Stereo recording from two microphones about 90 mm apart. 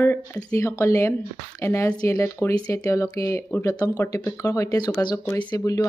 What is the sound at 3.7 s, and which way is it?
Speech, 45° left (ahead or behind).